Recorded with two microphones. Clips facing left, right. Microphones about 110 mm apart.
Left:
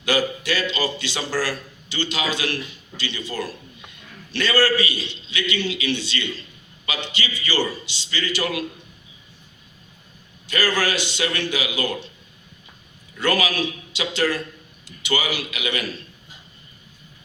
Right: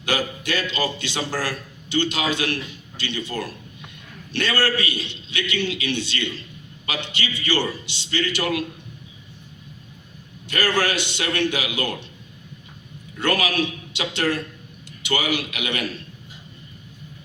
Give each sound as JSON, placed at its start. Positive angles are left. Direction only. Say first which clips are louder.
{"t": 0.1, "sound": "a man's voice", "louder": "left 2 dB", "side_deg": -50}
{"t": 10.5, "sound": "a man's voice", "louder": "even", "side_deg": -60}
{"t": 13.1, "sound": "a man's voice", "louder": "even", "side_deg": -60}